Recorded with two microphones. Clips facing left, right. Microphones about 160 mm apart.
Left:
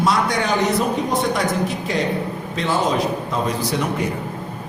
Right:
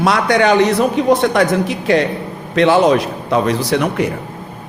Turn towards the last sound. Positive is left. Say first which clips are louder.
# right 6 dB
turn(degrees=-75)  # may be behind; listen again after turning